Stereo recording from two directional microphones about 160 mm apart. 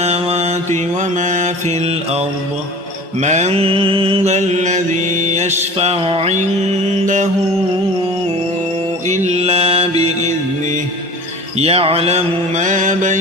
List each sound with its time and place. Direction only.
0.0 s mantra: 40° right (ahead or behind)
7.0 s mantra: 50° right (ahead or behind)
9.0 s mantra: 45° right (ahead or behind)
10.0 s music: 45° right (ahead or behind)
11.5 s mantra: 40° right (ahead or behind)